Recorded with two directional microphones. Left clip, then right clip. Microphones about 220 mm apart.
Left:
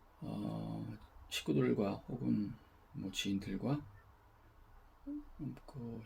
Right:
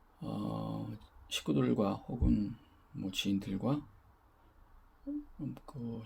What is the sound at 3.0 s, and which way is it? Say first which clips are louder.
Speech: right 4 dB; 25° right (ahead or behind).